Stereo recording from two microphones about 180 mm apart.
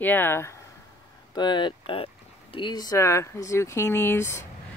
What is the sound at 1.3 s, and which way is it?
Speech, 25° left (ahead or behind).